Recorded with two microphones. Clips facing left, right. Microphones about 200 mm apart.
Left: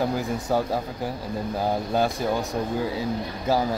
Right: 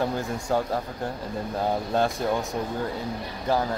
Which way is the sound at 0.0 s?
Centre (ahead or behind).